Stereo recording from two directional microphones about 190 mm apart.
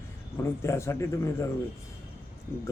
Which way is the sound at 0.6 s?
15° left (ahead or behind).